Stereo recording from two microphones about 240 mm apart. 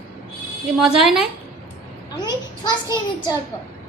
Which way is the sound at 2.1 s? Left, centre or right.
Centre.